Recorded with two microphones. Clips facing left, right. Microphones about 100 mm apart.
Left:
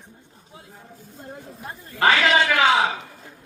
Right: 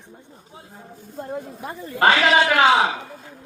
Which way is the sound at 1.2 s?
60° right (ahead or behind).